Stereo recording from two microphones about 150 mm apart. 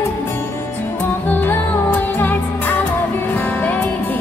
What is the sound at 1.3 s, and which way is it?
Music, 15° left (ahead or behind).